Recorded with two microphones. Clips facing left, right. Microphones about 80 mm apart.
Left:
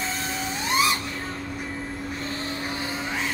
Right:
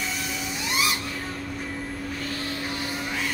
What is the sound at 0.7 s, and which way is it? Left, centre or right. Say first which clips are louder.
Vehicle: left 4 dB; left.